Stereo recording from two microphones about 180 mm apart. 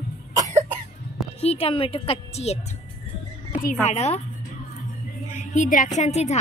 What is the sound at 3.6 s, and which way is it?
Speech, 40° left (ahead or behind).